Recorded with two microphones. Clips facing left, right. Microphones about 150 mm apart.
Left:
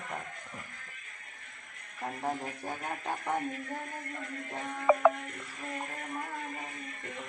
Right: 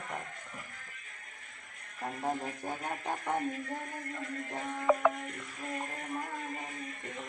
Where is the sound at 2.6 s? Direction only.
10° right (ahead or behind).